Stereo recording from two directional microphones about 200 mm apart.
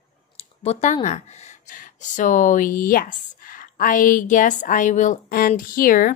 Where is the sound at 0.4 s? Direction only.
35° left (ahead or behind).